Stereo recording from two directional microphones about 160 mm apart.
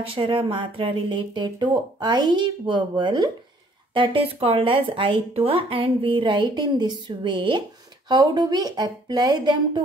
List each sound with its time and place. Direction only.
0.0 s speech: 35° right (ahead or behind)